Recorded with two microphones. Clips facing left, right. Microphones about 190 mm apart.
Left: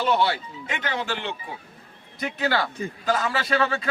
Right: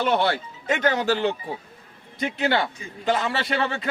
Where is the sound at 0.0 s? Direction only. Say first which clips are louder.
Right 1 dB; 55° right (ahead or behind).